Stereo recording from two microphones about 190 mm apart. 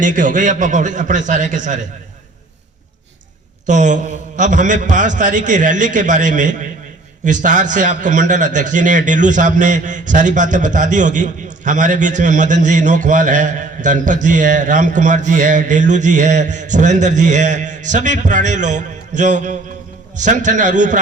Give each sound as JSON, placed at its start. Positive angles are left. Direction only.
{"t": 0.0, "sound": "a man's voice", "side_deg": -40}
{"t": 3.7, "sound": "a man's voice", "side_deg": -40}